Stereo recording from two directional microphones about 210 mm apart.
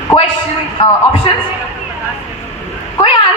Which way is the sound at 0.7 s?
25° left (ahead or behind).